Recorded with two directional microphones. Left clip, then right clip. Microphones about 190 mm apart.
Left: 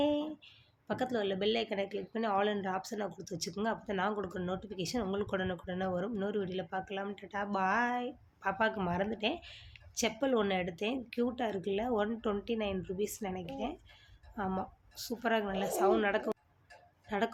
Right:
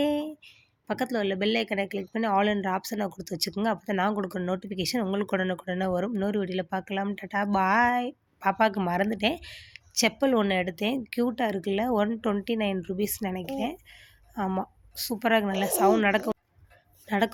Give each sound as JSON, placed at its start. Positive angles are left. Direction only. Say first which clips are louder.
{"t": 0.0, "sound": "a woman's voice", "louder": "right 5 dB", "side_deg": -40}